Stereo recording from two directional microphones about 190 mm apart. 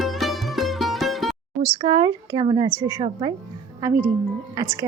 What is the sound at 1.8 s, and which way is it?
A woman's voice, 25° right (ahead or behind).